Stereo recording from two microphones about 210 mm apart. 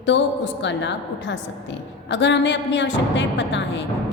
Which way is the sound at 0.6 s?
60° left (ahead or behind).